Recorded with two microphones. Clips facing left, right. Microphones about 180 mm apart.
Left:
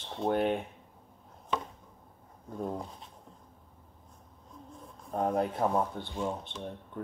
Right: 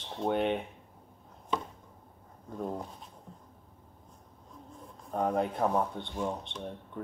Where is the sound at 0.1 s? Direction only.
Centre (ahead or behind).